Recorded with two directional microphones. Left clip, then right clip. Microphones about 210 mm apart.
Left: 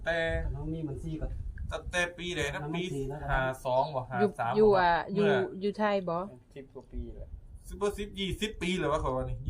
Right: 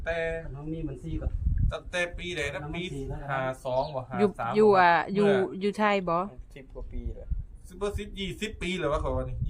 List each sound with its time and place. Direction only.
0.0 s speech: 5° left (ahead or behind)
1.6 s speech: centre (ahead or behind)
4.5 s speech: 30° right (ahead or behind)
5.2 s speech: centre (ahead or behind)
5.5 s speech: 30° right (ahead or behind)
7.8 s speech: centre (ahead or behind)